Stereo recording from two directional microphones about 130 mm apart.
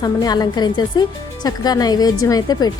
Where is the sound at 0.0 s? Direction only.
30° left (ahead or behind).